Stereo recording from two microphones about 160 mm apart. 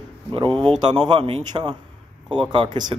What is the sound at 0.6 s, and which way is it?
A man's voice, 30° right (ahead or behind).